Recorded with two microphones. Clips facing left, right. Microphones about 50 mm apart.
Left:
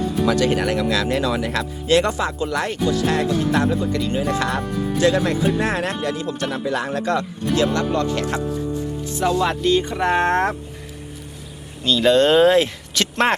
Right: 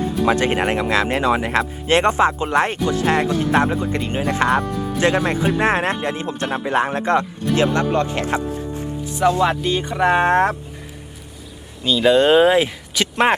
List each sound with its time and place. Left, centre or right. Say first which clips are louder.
0.3 s speech: right 1 dB; right
9.5 s speech: left 2 dB; centre
11.9 s speech: right 1 dB; centre